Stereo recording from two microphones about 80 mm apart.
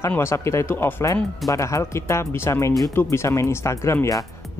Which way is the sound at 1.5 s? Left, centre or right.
Left.